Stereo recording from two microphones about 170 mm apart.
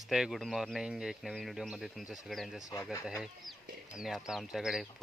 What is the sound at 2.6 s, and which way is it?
Speech, 20° left (ahead or behind).